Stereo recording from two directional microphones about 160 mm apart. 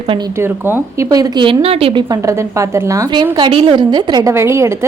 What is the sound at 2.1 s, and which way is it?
A woman's voice, 20° right (ahead or behind).